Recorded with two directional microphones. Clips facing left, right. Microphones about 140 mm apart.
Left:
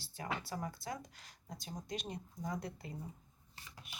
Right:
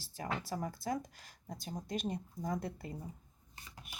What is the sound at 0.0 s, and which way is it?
Speech, 40° right (ahead or behind).